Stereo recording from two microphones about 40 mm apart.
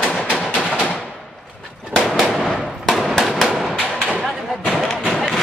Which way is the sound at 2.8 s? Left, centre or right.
Centre.